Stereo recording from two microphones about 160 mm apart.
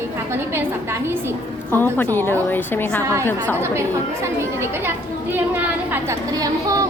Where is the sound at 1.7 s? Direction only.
10° left (ahead or behind).